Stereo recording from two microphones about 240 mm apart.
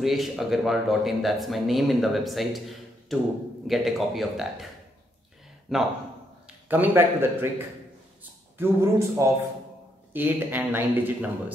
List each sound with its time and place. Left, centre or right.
0.0 s speech: centre
5.7 s speech: centre